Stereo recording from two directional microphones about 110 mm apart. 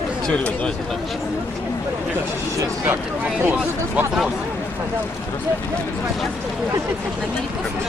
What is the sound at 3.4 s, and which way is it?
Speech, 20° right (ahead or behind).